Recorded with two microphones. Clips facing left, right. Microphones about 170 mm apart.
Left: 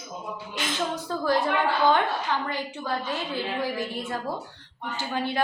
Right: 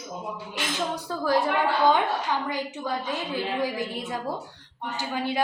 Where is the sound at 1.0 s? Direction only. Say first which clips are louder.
Right 1 dB; 10° right (ahead or behind).